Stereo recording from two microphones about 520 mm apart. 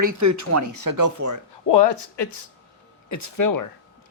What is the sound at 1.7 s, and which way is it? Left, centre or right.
Speech, left.